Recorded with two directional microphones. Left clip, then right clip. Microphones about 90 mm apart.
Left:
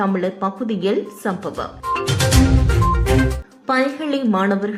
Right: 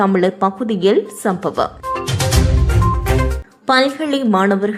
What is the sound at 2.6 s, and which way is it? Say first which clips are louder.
Music: even; centre (ahead or behind).